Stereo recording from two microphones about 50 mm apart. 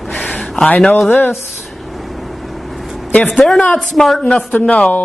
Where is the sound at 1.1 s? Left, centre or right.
Left.